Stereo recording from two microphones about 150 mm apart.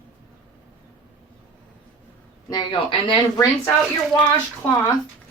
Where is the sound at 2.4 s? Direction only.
30° left (ahead or behind).